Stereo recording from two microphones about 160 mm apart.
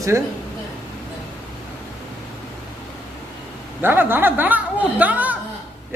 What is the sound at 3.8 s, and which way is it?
Speech, 10° right (ahead or behind).